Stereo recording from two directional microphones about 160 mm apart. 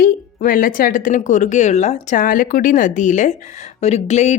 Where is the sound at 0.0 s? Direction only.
60° left (ahead or behind).